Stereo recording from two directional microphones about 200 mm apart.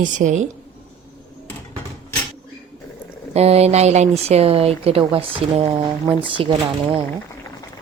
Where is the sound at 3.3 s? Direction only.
30° right (ahead or behind).